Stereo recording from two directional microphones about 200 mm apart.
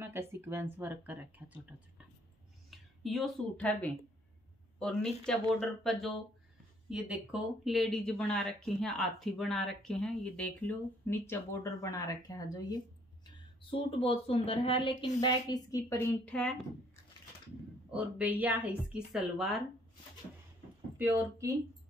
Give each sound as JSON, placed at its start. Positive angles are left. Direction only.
{"t": 0.0, "sound": "speech", "side_deg": -10}
{"t": 17.9, "sound": "speech", "side_deg": -5}
{"t": 21.0, "sound": "speech", "side_deg": -15}